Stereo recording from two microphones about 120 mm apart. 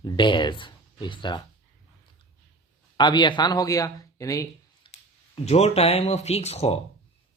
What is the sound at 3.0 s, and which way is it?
Speech, 40° left (ahead or behind).